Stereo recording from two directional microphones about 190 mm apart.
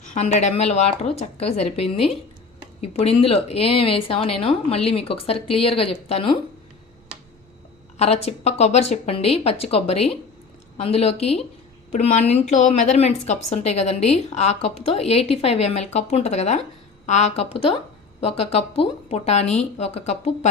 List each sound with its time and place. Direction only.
0.1 s a woman's voice: 35° left (ahead or behind)
7.9 s a woman's voice: 35° left (ahead or behind)